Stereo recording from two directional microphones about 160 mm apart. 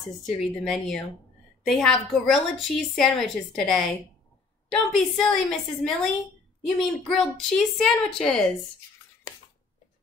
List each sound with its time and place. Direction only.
0.2 s a woman's voice: centre (ahead or behind)